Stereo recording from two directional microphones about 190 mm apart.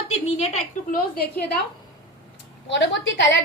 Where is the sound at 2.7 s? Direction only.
70° left (ahead or behind).